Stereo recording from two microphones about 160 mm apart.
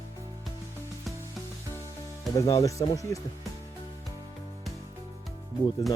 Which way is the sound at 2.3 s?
20° left (ahead or behind).